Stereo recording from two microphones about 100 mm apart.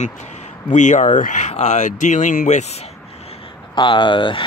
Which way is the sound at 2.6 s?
90° left.